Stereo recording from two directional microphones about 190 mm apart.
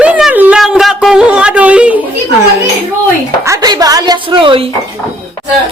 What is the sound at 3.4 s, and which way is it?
A woman's voice, 15° right (ahead or behind).